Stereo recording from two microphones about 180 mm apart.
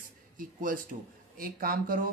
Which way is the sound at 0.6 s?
50° right (ahead or behind).